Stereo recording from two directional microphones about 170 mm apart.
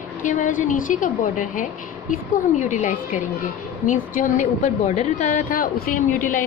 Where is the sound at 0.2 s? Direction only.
50° left (ahead or behind).